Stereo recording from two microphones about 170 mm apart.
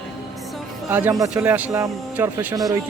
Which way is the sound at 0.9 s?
10° right (ahead or behind).